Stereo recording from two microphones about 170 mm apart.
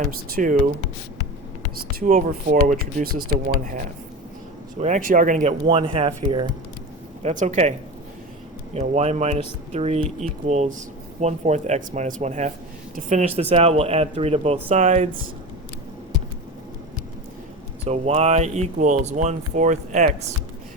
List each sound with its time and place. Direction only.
0.0 s speech: 50° right (ahead or behind)
1.7 s speech: 60° right (ahead or behind)
4.8 s speech: 50° right (ahead or behind)
5.6 s speech: 30° right (ahead or behind)
7.2 s speech: 40° right (ahead or behind)
8.7 s speech: 40° right (ahead or behind)
17.8 s speech: 40° right (ahead or behind)